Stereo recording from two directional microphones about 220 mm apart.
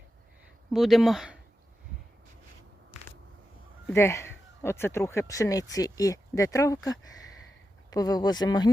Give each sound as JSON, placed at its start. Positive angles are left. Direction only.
{"t": 0.7, "sound": "speech", "side_deg": 0}
{"t": 3.8, "sound": "speech", "side_deg": 10}